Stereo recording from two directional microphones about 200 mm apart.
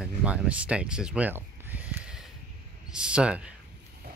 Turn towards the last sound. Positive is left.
turn(degrees=-5)  # may be behind; listen again after turning